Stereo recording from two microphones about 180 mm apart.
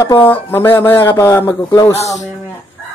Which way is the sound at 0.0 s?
15° left (ahead or behind).